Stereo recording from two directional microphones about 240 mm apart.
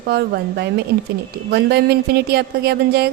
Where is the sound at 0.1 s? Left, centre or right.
Right.